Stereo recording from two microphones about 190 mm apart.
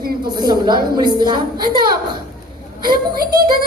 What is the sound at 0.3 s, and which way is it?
A woman's voice, 20° right (ahead or behind).